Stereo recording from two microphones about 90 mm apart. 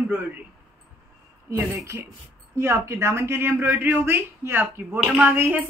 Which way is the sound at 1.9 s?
30° right (ahead or behind).